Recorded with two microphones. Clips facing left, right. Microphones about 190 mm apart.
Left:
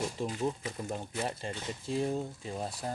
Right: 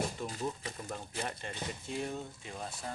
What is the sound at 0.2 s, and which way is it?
Speech, 25° left (ahead or behind).